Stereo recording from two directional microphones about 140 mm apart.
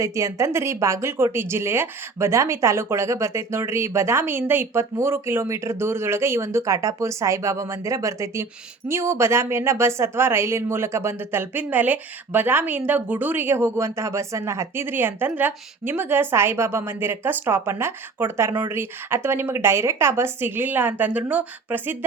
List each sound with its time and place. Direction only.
0.0 s speech: 20° right (ahead or behind)